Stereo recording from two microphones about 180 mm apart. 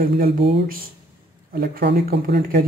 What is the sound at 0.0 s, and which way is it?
Speech, 60° right (ahead or behind).